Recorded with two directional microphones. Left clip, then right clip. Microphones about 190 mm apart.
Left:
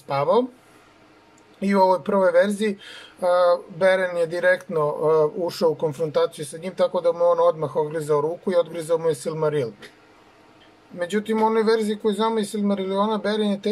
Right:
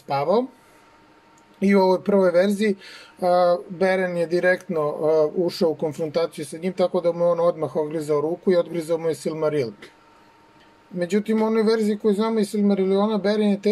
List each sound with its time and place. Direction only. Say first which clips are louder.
0.1 s speech: left 1 dB; 35° right (ahead or behind)
1.6 s speech: even; 35° right (ahead or behind)
11.0 s speech: even; 35° right (ahead or behind)